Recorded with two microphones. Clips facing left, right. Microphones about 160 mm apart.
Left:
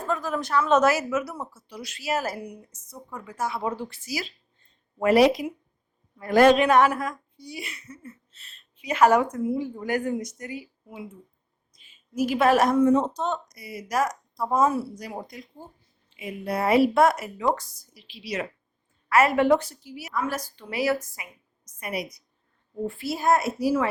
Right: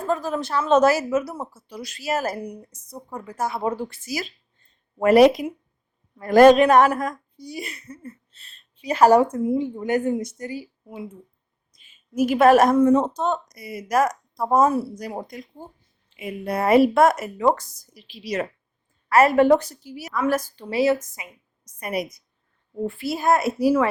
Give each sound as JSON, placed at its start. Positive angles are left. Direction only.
{"t": 0.1, "sound": "a woman's voice", "side_deg": -30}
{"t": 9.3, "sound": "speech", "side_deg": -20}
{"t": 12.1, "sound": "a woman's voice", "side_deg": -50}
{"t": 20.7, "sound": "speech", "side_deg": -25}
{"t": 21.6, "sound": "a woman's voice", "side_deg": -40}
{"t": 23.0, "sound": "a woman's voice", "side_deg": -65}